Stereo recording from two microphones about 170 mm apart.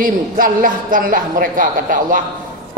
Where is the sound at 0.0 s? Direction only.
55° right (ahead or behind).